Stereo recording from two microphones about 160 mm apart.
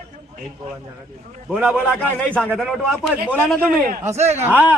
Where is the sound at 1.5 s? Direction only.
10° right (ahead or behind); by 3.6 s 10° left (ahead or behind).